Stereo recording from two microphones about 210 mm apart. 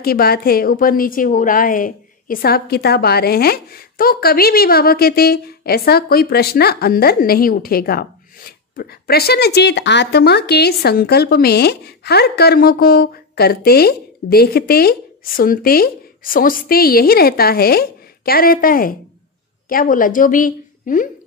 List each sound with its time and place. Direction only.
0.0 s a woman's voice: 45° left (ahead or behind)